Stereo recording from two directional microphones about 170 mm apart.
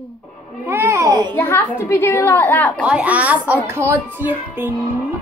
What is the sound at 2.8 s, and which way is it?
A woman's voice, 10° right (ahead or behind).